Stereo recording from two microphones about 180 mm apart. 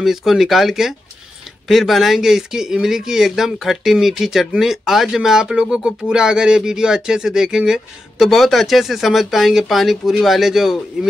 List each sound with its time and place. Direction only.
0.0 s speech: centre (ahead or behind)